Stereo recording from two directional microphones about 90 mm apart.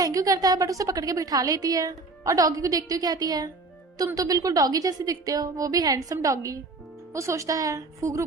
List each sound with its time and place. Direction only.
0.0 s a woman's voice: 40° right (ahead or behind)